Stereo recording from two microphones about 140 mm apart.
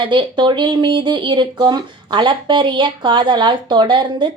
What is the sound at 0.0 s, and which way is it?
Speech, 35° right (ahead or behind).